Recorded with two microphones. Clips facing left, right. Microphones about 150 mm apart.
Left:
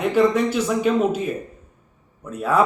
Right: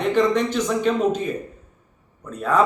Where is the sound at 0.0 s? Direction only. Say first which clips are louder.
Left 1 dB; 5° left (ahead or behind).